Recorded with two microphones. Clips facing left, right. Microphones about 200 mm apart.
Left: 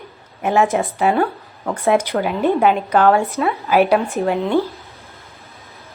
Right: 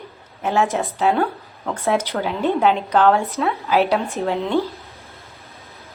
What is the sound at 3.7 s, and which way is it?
Speech, 15° left (ahead or behind).